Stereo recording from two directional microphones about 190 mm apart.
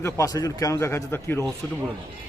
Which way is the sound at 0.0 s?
15° left (ahead or behind).